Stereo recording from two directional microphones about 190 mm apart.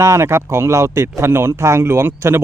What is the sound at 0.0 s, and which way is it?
Speech, 15° right (ahead or behind).